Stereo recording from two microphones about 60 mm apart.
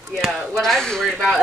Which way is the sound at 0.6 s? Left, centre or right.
Centre.